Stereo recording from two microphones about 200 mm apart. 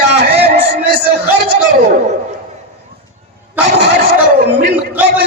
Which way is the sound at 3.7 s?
55° right (ahead or behind).